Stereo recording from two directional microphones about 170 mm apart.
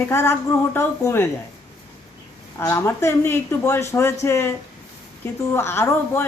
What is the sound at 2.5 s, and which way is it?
Speech, 15° left (ahead or behind).